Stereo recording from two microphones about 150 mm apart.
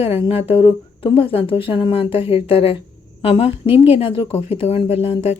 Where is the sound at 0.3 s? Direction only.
40° left (ahead or behind).